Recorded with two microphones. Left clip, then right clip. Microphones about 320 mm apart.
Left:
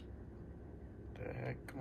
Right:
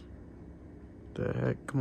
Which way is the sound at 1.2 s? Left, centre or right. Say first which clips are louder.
Right 12 dB; right.